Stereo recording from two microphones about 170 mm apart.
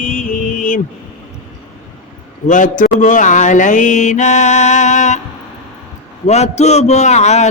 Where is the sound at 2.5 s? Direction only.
50° left (ahead or behind).